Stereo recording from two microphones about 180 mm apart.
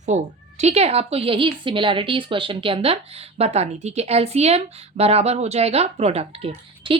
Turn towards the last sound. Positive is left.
turn(degrees=-30)  # may be behind; listen again after turning